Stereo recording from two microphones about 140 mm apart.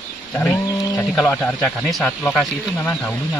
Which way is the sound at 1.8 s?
5° left (ahead or behind).